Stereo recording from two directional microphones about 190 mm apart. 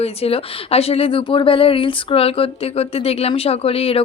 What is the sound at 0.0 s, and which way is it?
Speech, 30° left (ahead or behind).